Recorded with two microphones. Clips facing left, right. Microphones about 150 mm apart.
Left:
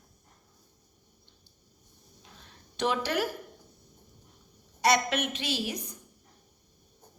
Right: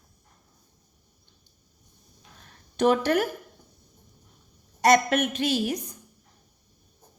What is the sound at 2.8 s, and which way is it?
Speech, 50° right (ahead or behind).